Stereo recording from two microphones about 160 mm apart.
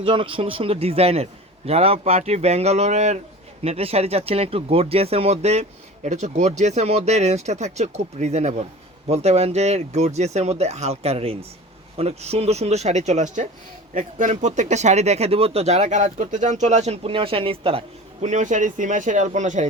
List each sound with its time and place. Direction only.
0.0 s a man's voice: 35° right (ahead or behind); by 19.6 s 50° right (ahead or behind)